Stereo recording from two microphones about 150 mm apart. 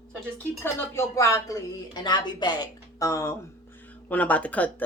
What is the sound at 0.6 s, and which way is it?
Speech, 15° left (ahead or behind).